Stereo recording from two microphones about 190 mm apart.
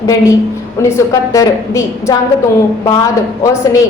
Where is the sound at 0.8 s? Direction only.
15° left (ahead or behind).